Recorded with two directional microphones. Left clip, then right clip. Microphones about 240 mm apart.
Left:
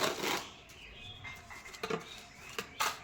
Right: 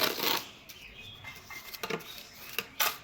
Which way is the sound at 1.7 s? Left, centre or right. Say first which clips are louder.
Right 1 dB; centre.